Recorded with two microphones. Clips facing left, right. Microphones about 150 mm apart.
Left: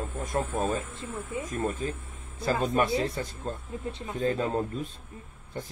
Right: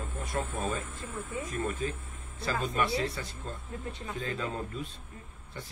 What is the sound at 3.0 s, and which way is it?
A man's voice, 50° left (ahead or behind).